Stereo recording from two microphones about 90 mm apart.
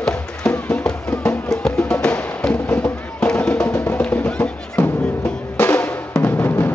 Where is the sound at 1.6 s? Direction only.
5° left (ahead or behind).